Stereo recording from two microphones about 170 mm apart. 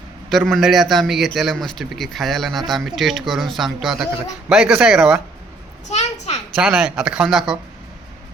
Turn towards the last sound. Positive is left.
turn(degrees=-5)  # may be behind; listen again after turning